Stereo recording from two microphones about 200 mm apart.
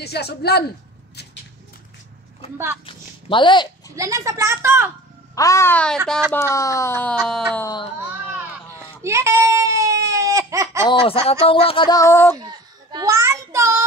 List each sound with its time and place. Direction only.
0.0 s a woman's voice: 55° left (ahead or behind)
2.5 s speech: 15° right (ahead or behind)
2.9 s speech: 25° left (ahead or behind)
3.9 s speech: 15° right (ahead or behind)
5.3 s speech: 15° left (ahead or behind)
7.5 s speech: 15° left (ahead or behind)
8.7 s baby cry: 15° right (ahead or behind)
10.8 s speech: 25° left (ahead or behind)
12.4 s a sound: 20° right (ahead or behind)